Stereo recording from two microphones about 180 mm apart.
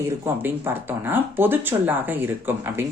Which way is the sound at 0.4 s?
10° right (ahead or behind).